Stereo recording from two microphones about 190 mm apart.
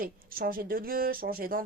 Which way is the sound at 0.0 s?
50° right (ahead or behind).